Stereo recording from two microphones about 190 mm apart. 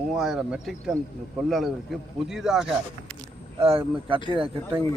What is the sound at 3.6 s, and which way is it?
Speech, 30° right (ahead or behind).